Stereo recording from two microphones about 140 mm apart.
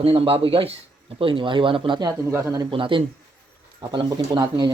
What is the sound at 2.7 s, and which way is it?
A man's voice, 40° right (ahead or behind).